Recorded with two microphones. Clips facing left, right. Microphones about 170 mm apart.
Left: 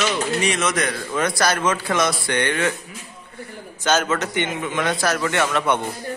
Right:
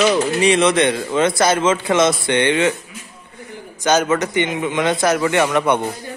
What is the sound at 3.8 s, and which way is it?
A man's voice, 10° right (ahead or behind).